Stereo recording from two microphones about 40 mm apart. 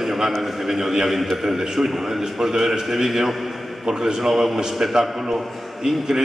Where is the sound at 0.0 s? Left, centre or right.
Centre.